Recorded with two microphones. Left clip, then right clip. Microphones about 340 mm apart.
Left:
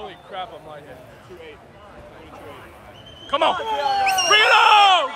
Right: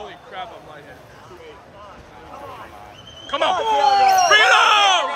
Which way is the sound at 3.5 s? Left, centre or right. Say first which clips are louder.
Right 6 dB; centre.